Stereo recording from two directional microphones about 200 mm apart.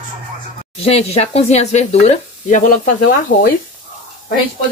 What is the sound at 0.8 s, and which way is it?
Speech, 30° left (ahead or behind).